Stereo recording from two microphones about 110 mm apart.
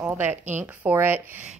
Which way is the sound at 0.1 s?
15° right (ahead or behind).